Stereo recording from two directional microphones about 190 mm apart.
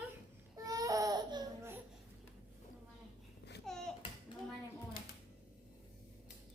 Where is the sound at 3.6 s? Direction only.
5° left (ahead or behind).